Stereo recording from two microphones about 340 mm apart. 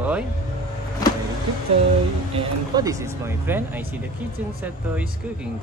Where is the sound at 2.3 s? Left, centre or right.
Centre.